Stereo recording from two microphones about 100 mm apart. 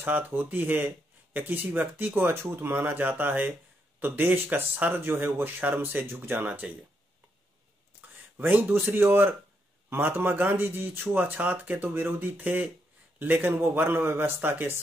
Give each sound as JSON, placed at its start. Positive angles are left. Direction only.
{"t": 0.0, "sound": "speech", "side_deg": -20}
{"t": 8.4, "sound": "speech", "side_deg": -15}